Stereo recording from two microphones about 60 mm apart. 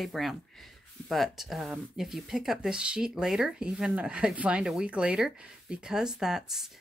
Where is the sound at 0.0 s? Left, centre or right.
Centre.